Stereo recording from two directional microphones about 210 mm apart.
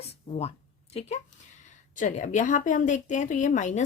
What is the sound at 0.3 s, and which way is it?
A woman's voice, 25° left (ahead or behind).